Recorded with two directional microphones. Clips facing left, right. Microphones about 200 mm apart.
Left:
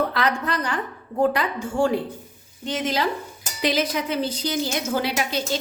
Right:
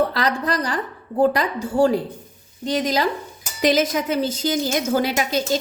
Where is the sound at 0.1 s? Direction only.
35° right (ahead or behind).